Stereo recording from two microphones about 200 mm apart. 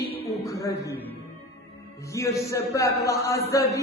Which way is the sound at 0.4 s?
15° left (ahead or behind).